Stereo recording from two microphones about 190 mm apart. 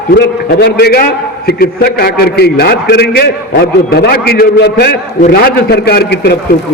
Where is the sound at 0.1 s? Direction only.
60° left (ahead or behind).